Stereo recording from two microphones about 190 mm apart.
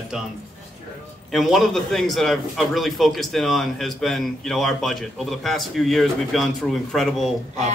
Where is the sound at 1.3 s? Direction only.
Centre (ahead or behind).